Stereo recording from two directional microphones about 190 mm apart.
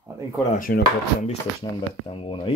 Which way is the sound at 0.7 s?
55° left (ahead or behind).